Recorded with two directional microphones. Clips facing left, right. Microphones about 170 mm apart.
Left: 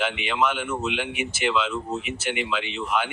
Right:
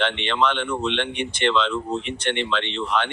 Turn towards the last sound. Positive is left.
turn(degrees=5)  # may be behind; listen again after turning